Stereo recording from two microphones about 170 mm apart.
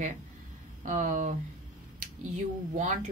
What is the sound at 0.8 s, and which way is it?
Speech, 50° right (ahead or behind).